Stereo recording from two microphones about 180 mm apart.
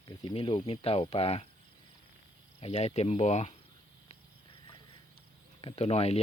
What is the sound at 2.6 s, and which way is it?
Speech, 35° left (ahead or behind).